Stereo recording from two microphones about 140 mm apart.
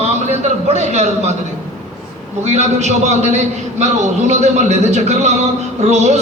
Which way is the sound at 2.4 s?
55° right (ahead or behind).